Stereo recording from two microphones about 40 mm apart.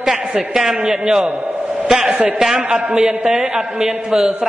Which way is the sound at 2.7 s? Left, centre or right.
Right.